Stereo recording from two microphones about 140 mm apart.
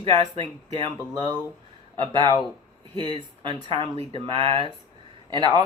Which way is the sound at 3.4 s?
35° right (ahead or behind).